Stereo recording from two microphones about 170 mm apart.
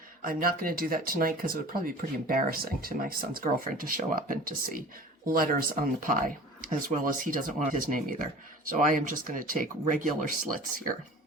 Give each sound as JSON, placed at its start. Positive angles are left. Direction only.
{"t": 0.2, "sound": "speech", "side_deg": -55}